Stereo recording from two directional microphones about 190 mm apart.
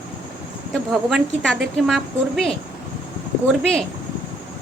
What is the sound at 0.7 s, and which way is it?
Speech, centre (ahead or behind).